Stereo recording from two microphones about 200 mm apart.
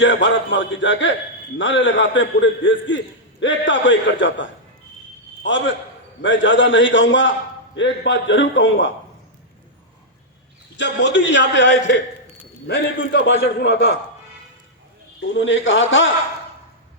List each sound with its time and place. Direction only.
0.0 s a man's voice: 65° left (ahead or behind)
10.8 s a man's voice: 65° left (ahead or behind)
15.4 s a man's voice: 70° left (ahead or behind)